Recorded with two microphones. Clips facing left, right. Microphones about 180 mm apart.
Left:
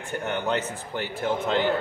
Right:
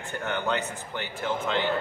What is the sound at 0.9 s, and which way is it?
Speech, 40° left (ahead or behind).